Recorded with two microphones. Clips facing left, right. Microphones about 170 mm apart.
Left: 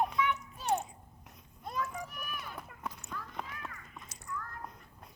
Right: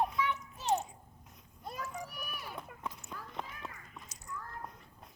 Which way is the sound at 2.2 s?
10° right (ahead or behind).